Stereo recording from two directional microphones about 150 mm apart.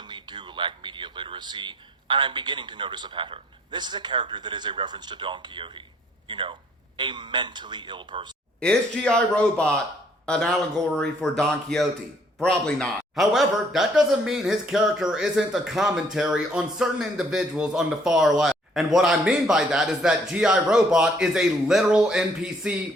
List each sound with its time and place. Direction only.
0.1 s a man's voice: 30° right (ahead or behind)
8.6 s a man's voice: 5° left (ahead or behind)